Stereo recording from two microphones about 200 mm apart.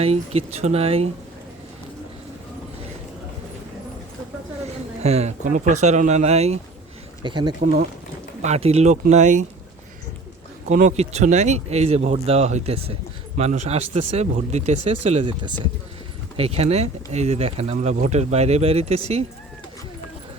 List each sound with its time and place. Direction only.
0.0 s speech: 30° right (ahead or behind)
5.0 s speech: 30° right (ahead or behind)
10.7 s speech: 40° right (ahead or behind)